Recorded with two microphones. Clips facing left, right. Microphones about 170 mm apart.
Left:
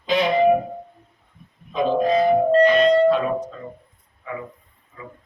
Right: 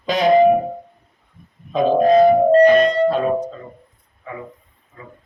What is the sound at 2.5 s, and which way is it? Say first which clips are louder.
Speech: right 3 dB; 45° right (ahead or behind).